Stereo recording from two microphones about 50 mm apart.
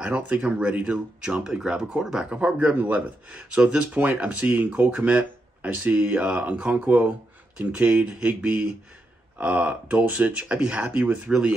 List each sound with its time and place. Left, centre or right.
0.0 s speech: right
2.3 s speech: right
3.3 s speech: right
3.9 s speech: right
7.5 s speech: right
11.2 s speech: centre